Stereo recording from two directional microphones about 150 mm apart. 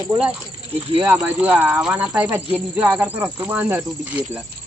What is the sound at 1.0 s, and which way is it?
Speech, 10° right (ahead or behind).